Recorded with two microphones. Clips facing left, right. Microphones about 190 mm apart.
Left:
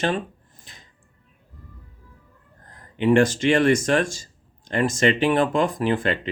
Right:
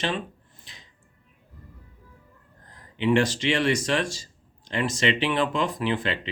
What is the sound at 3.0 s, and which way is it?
Speech, 50° left (ahead or behind).